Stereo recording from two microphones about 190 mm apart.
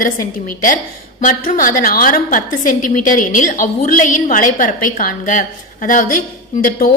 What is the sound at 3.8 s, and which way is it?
A woman's voice, 45° left (ahead or behind).